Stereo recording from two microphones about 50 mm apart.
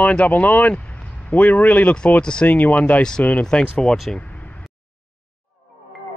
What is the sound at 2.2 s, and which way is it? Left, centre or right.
Speech, centre.